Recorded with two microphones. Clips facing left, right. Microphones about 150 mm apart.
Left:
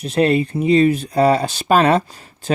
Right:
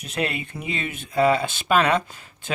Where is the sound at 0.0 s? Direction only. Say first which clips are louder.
Left 11 dB; 35° left (ahead or behind).